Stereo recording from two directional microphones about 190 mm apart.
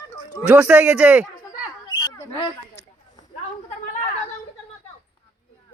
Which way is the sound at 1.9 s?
20° left (ahead or behind).